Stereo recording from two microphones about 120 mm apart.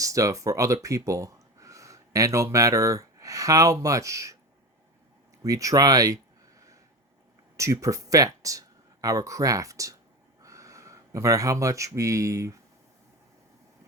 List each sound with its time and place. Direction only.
0.0 s speech: 30° right (ahead or behind)
5.4 s speech: 30° right (ahead or behind)
7.5 s speech: 25° right (ahead or behind)